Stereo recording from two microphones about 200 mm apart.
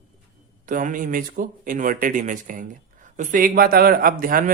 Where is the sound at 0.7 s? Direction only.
40° right (ahead or behind).